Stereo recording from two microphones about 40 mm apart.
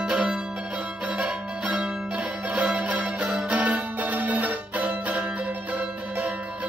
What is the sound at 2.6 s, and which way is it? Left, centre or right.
Music, right.